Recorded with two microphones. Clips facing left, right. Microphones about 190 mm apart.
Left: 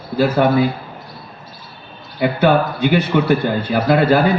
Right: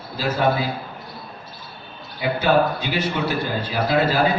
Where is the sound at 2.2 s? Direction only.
60° left (ahead or behind).